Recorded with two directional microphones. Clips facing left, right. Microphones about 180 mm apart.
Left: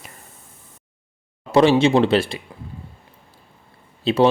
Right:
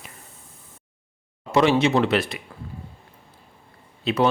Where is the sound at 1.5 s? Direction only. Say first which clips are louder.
Left 4 dB; 30° left (ahead or behind).